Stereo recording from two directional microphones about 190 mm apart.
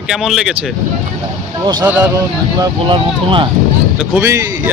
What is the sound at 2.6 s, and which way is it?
Speech, 25° right (ahead or behind).